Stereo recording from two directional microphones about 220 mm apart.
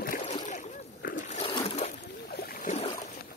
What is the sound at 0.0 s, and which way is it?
Splash, 35° left (ahead or behind).